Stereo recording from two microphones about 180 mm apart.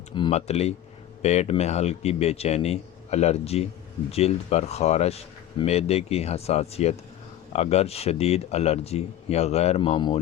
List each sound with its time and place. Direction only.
0.1 s speech: 30° left (ahead or behind)